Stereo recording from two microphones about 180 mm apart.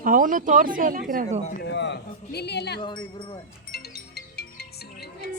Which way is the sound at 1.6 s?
80° left.